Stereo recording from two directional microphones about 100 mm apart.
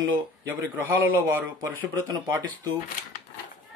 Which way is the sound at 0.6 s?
20° right (ahead or behind).